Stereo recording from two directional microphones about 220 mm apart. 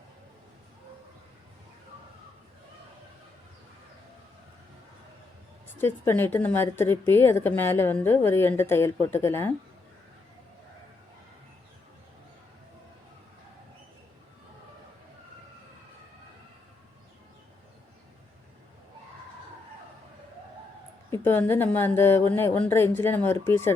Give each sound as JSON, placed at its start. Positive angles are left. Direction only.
{"t": 5.8, "sound": "a woman's voice", "side_deg": 10}
{"t": 21.1, "sound": "a woman's voice", "side_deg": 10}